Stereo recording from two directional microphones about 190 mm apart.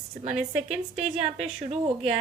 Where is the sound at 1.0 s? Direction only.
35° right (ahead or behind).